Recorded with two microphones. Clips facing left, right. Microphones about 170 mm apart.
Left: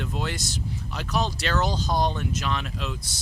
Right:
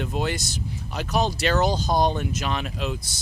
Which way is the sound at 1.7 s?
45° right (ahead or behind).